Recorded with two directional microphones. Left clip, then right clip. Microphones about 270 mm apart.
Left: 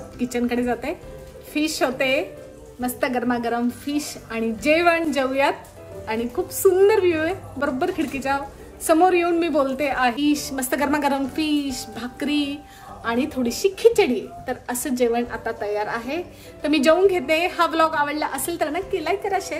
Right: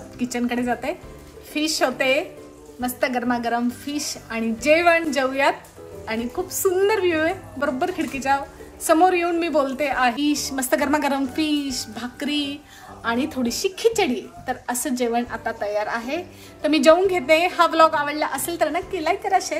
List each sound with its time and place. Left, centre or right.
0.2 s a woman's voice: centre